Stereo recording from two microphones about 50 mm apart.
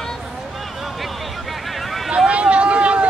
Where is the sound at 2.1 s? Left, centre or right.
Centre.